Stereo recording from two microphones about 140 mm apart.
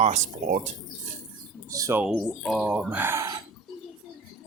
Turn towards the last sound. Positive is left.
turn(degrees=-20)  # may be behind; listen again after turning